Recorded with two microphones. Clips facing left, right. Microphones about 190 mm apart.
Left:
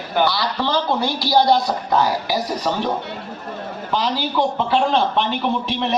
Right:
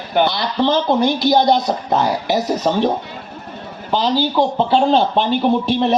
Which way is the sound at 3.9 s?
30° right (ahead or behind).